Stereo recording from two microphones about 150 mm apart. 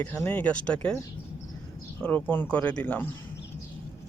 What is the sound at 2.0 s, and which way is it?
Speech, 10° left (ahead or behind).